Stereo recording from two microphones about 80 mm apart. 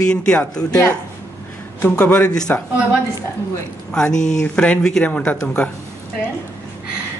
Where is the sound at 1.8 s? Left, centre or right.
Centre.